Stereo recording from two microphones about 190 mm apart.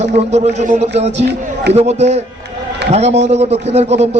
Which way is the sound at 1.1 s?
65° right (ahead or behind).